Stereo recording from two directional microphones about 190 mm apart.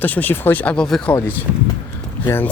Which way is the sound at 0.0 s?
10° left (ahead or behind).